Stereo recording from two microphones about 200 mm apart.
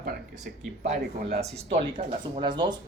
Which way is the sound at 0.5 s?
45° right (ahead or behind).